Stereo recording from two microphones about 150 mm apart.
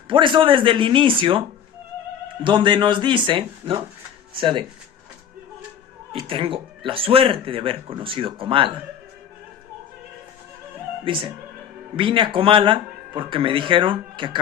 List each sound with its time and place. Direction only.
0.1 s speech: 35° right (ahead or behind)
2.4 s speech: 30° right (ahead or behind)
6.2 s speech: 35° right (ahead or behind)
11.0 s speech: 35° right (ahead or behind)